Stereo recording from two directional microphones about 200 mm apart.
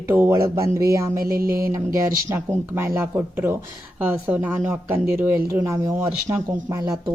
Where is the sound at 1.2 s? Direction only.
50° right (ahead or behind).